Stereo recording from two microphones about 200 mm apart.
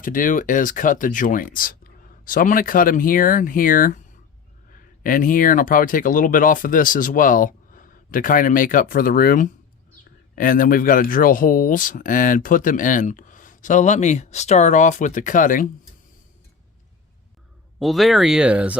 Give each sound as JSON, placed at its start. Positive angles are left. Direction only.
{"t": 0.0, "sound": "speech", "side_deg": 45}
{"t": 17.7, "sound": "speech", "side_deg": 0}